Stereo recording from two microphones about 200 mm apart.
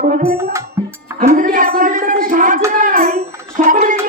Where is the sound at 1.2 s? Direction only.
40° right (ahead or behind).